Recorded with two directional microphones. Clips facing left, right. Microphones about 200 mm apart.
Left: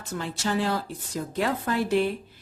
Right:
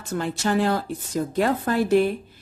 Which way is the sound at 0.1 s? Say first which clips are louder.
Right 5 dB; 55° right (ahead or behind).